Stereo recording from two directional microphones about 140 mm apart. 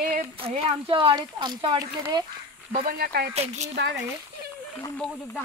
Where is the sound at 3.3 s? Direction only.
50° right (ahead or behind).